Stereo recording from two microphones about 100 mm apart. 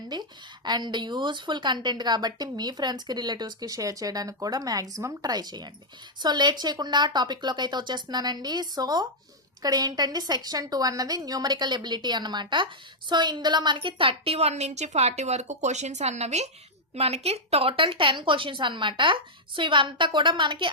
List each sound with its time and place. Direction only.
0.1 s a woman's voice: 45° right (ahead or behind)